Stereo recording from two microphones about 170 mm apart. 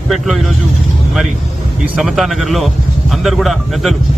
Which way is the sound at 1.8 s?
Centre (ahead or behind).